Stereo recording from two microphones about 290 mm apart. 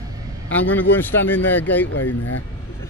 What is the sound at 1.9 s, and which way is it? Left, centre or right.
Speech, left.